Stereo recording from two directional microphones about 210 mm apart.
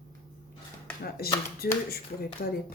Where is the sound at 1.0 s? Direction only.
45° left (ahead or behind).